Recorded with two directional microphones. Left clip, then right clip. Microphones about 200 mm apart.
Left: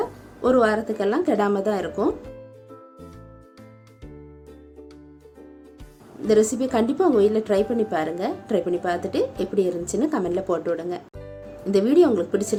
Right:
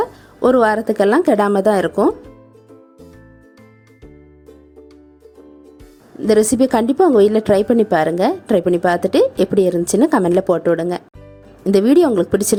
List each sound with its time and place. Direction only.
0.0 s a woman's voice: 45° right (ahead or behind)
6.2 s a woman's voice: 45° right (ahead or behind)